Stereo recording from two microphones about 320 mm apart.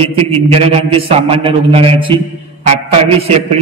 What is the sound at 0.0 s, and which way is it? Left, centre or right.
A man's voice, centre.